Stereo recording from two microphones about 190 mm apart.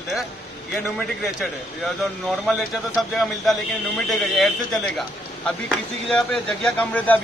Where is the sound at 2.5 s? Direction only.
Centre (ahead or behind).